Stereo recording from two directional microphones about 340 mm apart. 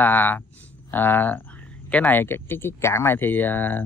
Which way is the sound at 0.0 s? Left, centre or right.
Centre.